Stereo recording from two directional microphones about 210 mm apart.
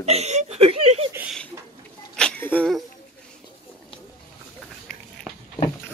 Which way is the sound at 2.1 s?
5° left (ahead or behind).